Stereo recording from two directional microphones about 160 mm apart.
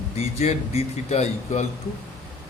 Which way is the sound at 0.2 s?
40° left (ahead or behind).